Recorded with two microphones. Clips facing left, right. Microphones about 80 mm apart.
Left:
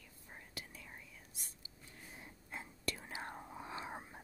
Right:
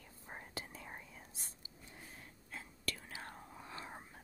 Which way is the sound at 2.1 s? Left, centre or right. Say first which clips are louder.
Left 5 dB; centre.